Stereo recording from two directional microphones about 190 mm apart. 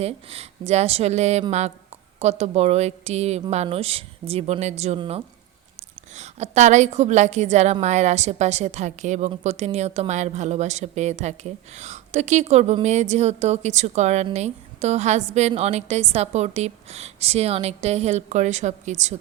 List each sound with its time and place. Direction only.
0.0 s a woman's voice: 30° right (ahead or behind)